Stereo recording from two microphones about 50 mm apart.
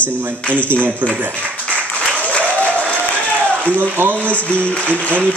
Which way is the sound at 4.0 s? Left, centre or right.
Right.